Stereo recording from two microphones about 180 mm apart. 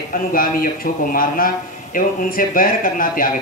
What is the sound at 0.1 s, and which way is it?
A man's voice, 50° left (ahead or behind).